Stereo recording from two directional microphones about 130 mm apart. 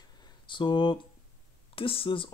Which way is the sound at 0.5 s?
40° left (ahead or behind).